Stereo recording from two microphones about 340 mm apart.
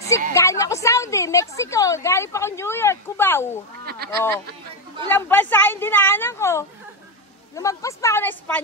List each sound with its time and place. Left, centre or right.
0.3 s a woman's voice: centre
3.8 s speech: right
5.1 s a woman's voice: centre